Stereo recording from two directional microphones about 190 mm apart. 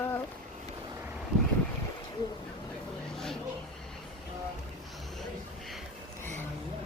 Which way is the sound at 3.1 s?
Centre (ahead or behind).